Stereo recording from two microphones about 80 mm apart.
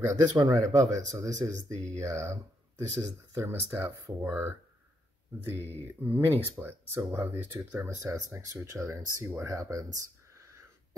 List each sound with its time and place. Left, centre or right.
0.0 s speech: right
3.3 s speech: right
9.2 s a sound: right